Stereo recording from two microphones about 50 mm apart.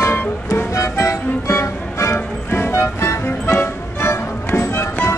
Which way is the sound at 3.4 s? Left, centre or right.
Left.